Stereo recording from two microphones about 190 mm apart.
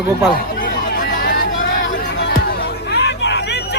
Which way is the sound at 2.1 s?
65° left (ahead or behind).